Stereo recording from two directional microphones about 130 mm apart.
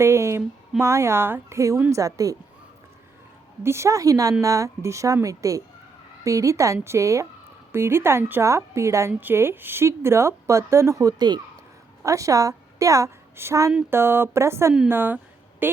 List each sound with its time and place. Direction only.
0.0 s a woman's voice: 20° right (ahead or behind)
3.6 s a woman's voice: 20° right (ahead or behind)